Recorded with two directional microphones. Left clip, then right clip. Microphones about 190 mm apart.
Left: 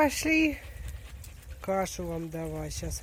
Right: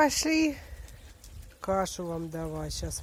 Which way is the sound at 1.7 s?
Centre (ahead or behind).